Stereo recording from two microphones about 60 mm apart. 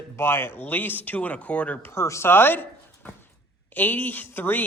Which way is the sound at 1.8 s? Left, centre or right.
Left.